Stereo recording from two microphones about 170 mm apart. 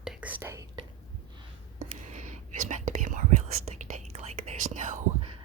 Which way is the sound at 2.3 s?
45° right (ahead or behind).